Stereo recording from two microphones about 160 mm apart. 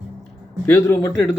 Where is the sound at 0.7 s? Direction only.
15° left (ahead or behind).